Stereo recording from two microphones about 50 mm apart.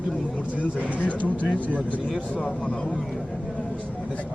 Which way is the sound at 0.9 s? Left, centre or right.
Left.